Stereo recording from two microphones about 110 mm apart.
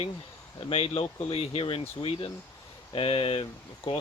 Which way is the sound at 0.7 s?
60° left (ahead or behind).